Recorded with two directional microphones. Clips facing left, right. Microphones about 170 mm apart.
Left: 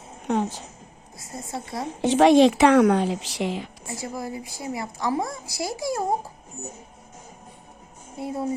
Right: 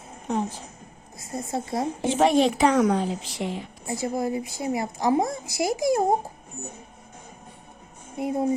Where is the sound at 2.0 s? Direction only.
75° left (ahead or behind); by 3.7 s 90° left.